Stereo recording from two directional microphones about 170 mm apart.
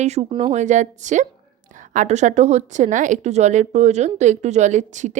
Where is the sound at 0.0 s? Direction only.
40° right (ahead or behind).